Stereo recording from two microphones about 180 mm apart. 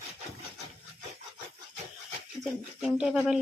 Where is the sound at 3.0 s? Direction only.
5° right (ahead or behind).